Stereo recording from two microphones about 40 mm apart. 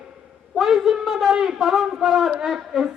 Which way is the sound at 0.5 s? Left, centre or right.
Centre.